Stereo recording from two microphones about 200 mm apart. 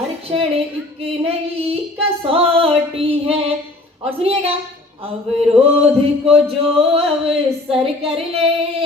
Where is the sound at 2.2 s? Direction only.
25° right (ahead or behind).